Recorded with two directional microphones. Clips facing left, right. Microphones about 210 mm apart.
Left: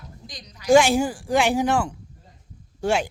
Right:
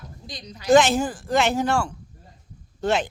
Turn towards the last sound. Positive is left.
turn(degrees=10)  # may be behind; listen again after turning